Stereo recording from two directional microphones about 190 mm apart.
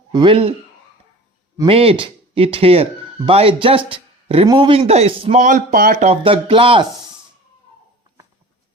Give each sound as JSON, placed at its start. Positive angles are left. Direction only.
{"t": 0.1, "sound": "speech", "side_deg": -25}
{"t": 1.5, "sound": "speech", "side_deg": -30}
{"t": 6.1, "sound": "speech", "side_deg": -30}